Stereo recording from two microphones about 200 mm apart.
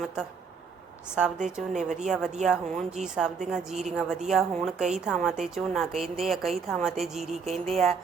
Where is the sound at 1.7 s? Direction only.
35° right (ahead or behind).